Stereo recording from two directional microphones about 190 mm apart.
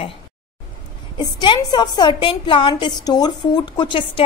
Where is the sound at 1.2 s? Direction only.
25° left (ahead or behind).